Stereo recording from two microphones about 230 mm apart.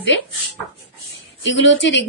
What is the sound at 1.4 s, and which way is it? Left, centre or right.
Speech, left.